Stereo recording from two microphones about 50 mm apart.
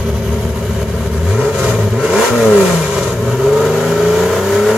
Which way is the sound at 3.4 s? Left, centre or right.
Centre.